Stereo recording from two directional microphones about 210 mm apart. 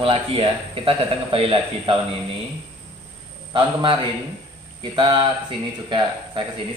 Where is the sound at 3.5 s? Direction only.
25° right (ahead or behind).